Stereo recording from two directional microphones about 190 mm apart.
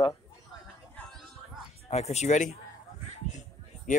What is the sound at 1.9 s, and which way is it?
Speech, 35° left (ahead or behind).